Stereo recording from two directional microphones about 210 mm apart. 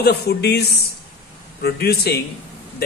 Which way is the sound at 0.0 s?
50° left (ahead or behind).